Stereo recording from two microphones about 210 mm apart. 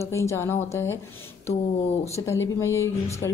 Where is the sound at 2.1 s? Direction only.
15° left (ahead or behind).